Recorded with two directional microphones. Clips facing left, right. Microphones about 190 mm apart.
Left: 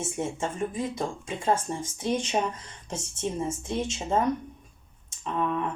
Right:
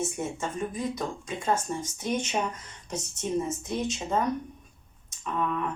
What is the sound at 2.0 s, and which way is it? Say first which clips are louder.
Speech: left 3 dB; 30° left (ahead or behind).